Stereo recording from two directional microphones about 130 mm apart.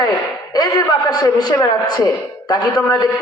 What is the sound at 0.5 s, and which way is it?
A man's voice, 30° left (ahead or behind).